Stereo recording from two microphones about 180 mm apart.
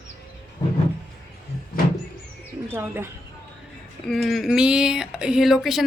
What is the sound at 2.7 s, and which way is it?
Speech, 10° right (ahead or behind).